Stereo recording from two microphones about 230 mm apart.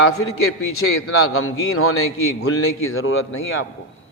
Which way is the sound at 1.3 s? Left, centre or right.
Left.